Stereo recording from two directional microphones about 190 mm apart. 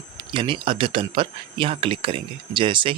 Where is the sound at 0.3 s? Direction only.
25° right (ahead or behind).